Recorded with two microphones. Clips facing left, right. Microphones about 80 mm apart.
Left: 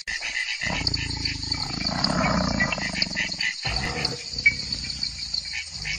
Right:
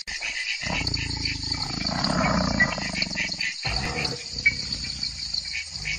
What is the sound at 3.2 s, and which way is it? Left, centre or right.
Wild animals, left.